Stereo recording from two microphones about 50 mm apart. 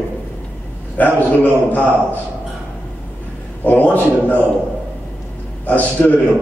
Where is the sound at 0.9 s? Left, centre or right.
Left.